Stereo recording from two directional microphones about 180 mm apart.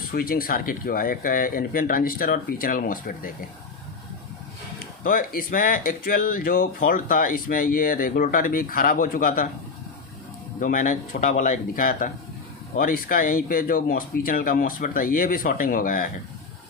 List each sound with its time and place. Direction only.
0.1 s speech: 55° left (ahead or behind)
5.0 s speech: 50° left (ahead or behind)
10.6 s speech: 45° left (ahead or behind)